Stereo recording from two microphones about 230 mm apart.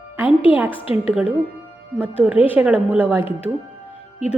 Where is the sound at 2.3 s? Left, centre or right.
Centre.